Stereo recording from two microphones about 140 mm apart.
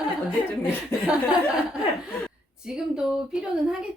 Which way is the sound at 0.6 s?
5° right (ahead or behind).